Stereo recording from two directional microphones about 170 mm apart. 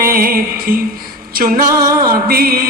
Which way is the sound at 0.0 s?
60° right (ahead or behind).